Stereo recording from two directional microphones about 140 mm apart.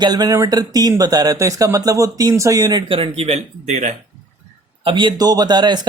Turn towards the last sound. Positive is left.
turn(degrees=-30)  # may be behind; listen again after turning